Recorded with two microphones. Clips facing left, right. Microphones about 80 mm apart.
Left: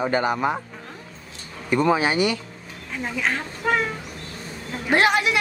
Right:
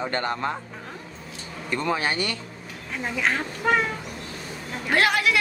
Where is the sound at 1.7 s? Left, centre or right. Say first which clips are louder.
Left 6 dB; centre.